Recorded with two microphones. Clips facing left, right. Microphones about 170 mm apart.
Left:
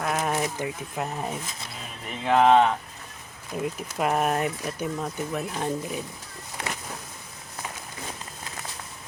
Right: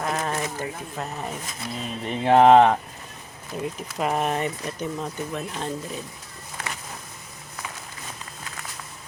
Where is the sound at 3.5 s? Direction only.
5° left (ahead or behind).